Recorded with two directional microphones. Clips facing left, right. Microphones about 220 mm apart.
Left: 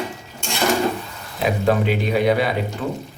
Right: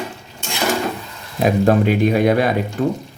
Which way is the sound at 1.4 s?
45° right (ahead or behind).